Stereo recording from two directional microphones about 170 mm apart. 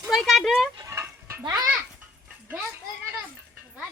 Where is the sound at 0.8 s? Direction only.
15° right (ahead or behind).